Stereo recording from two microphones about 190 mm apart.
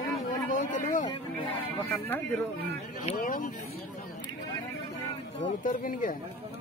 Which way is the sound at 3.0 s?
35° left (ahead or behind).